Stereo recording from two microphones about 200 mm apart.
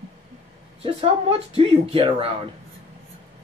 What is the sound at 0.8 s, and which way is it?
Speech, 25° right (ahead or behind).